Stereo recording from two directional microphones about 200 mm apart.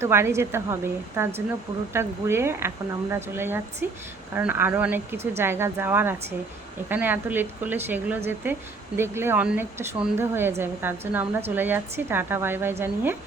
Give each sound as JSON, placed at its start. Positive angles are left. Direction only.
{"t": 0.0, "sound": "speech", "side_deg": -15}